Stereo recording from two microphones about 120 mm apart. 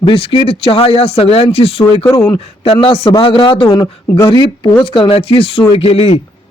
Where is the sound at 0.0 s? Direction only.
50° left (ahead or behind).